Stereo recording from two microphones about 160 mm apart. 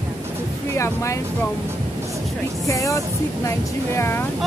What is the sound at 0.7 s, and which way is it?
Speech, 20° left (ahead or behind).